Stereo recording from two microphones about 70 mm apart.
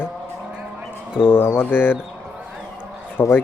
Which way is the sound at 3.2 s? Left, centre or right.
Left.